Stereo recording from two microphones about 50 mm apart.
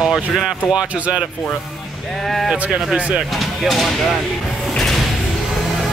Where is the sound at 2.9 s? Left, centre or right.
Right.